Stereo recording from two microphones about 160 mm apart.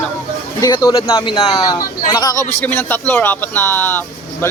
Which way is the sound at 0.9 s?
35° left (ahead or behind).